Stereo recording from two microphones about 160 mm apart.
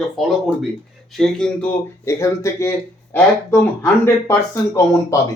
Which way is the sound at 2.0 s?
20° left (ahead or behind).